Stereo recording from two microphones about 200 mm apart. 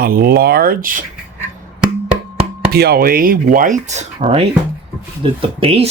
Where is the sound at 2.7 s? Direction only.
50° right (ahead or behind).